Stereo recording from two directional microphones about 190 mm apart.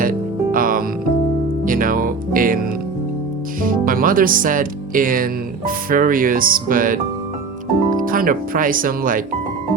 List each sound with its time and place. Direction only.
0.0 s music: 45° right (ahead or behind)
3.6 s speech: 45° right (ahead or behind)
8.0 s speech: 45° right (ahead or behind)